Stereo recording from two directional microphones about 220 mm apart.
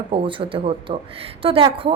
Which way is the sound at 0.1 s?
25° right (ahead or behind).